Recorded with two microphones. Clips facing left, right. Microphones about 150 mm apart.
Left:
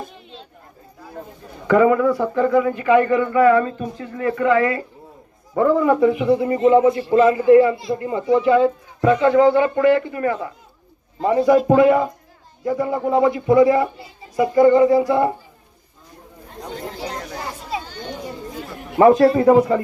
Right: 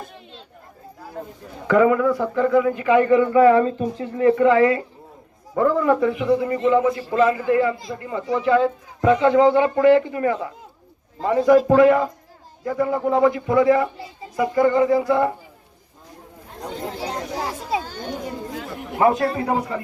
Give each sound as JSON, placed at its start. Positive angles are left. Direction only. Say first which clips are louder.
{"t": 1.6, "sound": "speech", "louder": "left 2 dB", "side_deg": 0}
{"t": 2.7, "sound": "speech", "louder": "even", "side_deg": -15}
{"t": 5.5, "sound": "a man's voice", "louder": "left 2 dB", "side_deg": 5}
{"t": 6.0, "sound": "a man's voice", "louder": "left 3 dB", "side_deg": 20}
{"t": 9.0, "sound": "speech", "louder": "left 1 dB", "side_deg": -20}
{"t": 11.2, "sound": "a man's voice", "louder": "even", "side_deg": 15}
{"t": 17.8, "sound": "children playing", "louder": "right 2 dB", "side_deg": -45}
{"t": 18.9, "sound": "a man's voice", "louder": "left 7 dB", "side_deg": 35}